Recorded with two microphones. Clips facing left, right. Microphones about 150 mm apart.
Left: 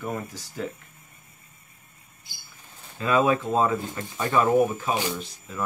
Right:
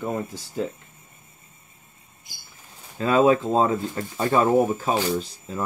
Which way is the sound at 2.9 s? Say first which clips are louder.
Right 4 dB; 30° right (ahead or behind).